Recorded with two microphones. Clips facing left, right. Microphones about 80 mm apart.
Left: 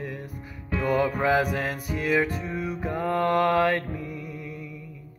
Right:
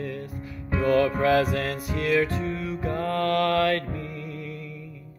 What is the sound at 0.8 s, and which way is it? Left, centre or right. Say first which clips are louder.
Music: right 3 dB; centre.